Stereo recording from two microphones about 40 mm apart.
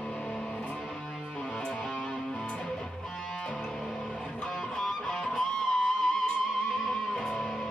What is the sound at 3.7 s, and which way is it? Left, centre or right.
Music, centre.